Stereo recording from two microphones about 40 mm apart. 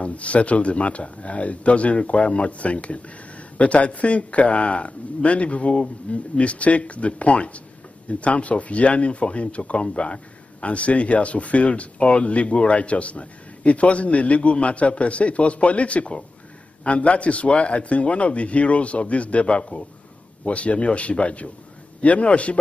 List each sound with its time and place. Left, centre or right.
0.0 s speech: left